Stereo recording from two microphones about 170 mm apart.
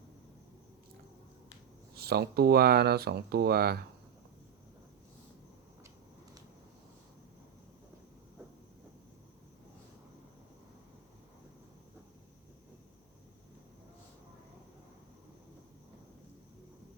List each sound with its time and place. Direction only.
2.0 s speech: 70° right (ahead or behind)